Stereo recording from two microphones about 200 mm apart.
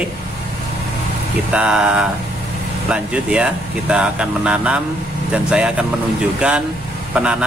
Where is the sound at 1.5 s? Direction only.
5° right (ahead or behind).